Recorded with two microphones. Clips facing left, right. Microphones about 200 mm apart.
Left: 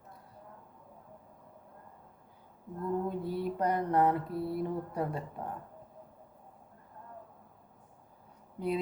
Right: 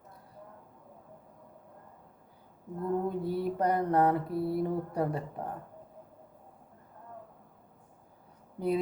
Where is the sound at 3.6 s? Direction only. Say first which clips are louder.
Right 1 dB; 35° right (ahead or behind).